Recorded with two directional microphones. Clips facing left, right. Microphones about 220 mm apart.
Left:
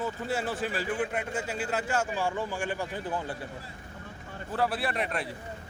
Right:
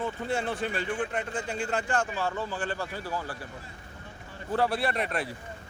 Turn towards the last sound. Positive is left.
turn(degrees=0)  # may be behind; listen again after turning